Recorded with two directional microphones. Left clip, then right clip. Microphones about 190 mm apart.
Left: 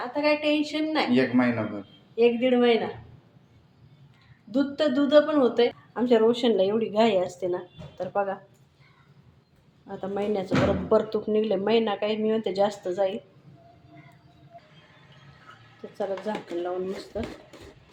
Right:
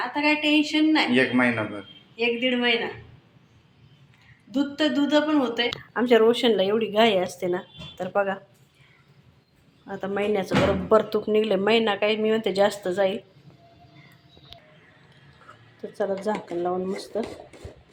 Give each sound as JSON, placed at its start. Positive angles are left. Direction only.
{"t": 0.1, "sound": "a woman's voice", "side_deg": 55}
{"t": 1.1, "sound": "speech", "side_deg": -5}
{"t": 2.1, "sound": "a woman's voice", "side_deg": 55}
{"t": 4.5, "sound": "a woman's voice", "side_deg": 55}
{"t": 5.9, "sound": "speech", "side_deg": -5}
{"t": 9.9, "sound": "speech", "side_deg": -5}
{"t": 16.0, "sound": "speech", "side_deg": -25}